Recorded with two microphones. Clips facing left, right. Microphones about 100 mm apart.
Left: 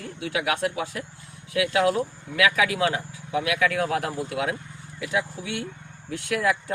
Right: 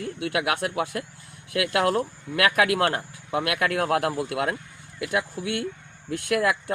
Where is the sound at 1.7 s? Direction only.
60° right (ahead or behind).